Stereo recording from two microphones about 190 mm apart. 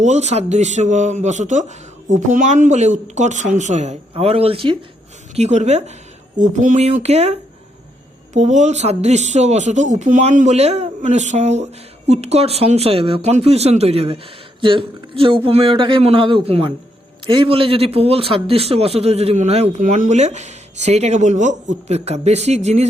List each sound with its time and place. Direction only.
0.0 s speech: 35° right (ahead or behind)